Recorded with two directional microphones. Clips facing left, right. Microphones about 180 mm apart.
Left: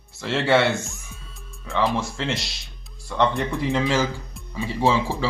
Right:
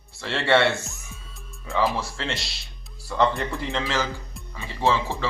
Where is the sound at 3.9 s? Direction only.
15° left (ahead or behind).